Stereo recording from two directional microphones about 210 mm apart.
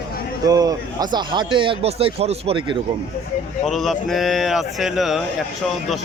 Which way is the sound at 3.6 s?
Centre (ahead or behind).